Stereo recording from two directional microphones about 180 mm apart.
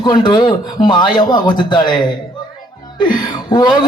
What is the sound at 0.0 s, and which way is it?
A man's voice, 25° left (ahead or behind).